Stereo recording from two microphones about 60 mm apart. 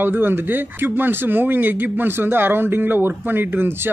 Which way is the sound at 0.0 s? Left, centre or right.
Right.